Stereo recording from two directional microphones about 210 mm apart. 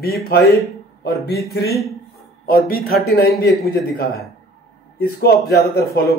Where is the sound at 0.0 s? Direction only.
50° left (ahead or behind).